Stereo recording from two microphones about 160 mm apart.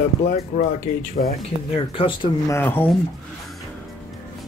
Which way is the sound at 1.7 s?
35° left (ahead or behind).